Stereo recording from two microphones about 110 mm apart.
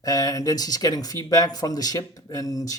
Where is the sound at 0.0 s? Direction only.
35° left (ahead or behind).